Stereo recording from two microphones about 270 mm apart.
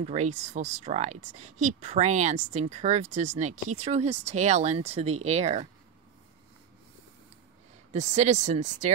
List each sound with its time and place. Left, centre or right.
0.0 s speech: right
7.9 s speech: right